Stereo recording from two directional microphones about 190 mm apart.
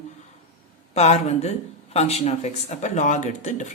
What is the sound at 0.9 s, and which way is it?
Speech, 35° left (ahead or behind).